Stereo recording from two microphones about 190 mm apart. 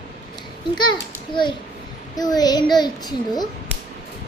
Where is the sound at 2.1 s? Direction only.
20° left (ahead or behind).